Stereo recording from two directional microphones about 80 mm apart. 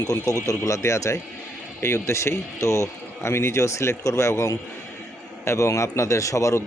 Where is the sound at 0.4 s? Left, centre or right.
Left.